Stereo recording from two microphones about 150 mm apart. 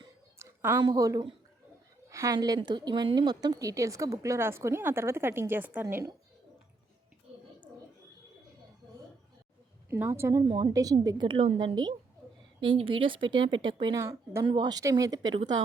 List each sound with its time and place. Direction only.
0.3 s a sound: 15° right (ahead or behind)
0.8 s a woman's voice: 25° right (ahead or behind)
9.9 s a woman's voice: 15° right (ahead or behind)
10.4 s a woman's voice: 35° right (ahead or behind)
14.0 s a woman's voice: 20° right (ahead or behind)
14.4 s a woman's voice: 30° right (ahead or behind)